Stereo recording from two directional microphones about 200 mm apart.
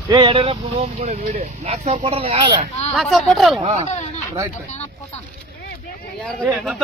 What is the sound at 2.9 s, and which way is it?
Speech, centre (ahead or behind).